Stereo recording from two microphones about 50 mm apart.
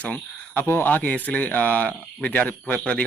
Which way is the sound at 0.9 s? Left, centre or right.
Left.